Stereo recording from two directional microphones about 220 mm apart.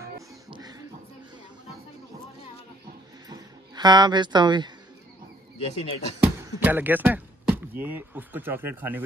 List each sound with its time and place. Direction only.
0.0 s beatboxing: 15° right (ahead or behind)
3.3 s music: 20° right (ahead or behind)
5.6 s speech: 25° left (ahead or behind)
6.2 s speech: 10° right (ahead or behind)